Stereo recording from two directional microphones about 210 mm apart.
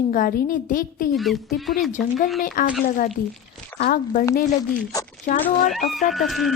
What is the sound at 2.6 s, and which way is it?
Speech, 40° left (ahead or behind).